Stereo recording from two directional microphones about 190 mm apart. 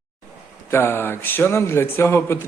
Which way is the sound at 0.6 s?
10° left (ahead or behind).